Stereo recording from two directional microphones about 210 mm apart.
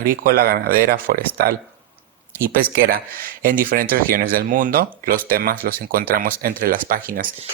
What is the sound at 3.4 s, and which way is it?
Speech, 45° right (ahead or behind).